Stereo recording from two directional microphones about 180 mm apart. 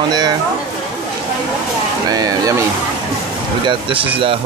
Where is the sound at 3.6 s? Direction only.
30° right (ahead or behind).